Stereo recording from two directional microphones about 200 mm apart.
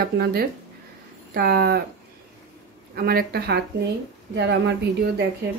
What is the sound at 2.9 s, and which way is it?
Speech, 50° right (ahead or behind).